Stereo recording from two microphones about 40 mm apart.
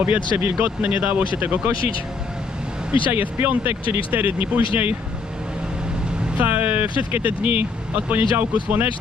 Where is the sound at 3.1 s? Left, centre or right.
Right.